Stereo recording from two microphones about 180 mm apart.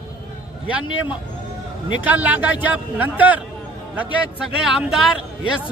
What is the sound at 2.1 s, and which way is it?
A man's voice, 10° right (ahead or behind).